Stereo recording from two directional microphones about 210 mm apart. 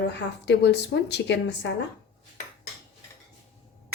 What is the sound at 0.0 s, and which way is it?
A woman's voice, 55° left (ahead or behind).